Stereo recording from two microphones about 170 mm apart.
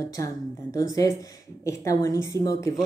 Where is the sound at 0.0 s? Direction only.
20° left (ahead or behind).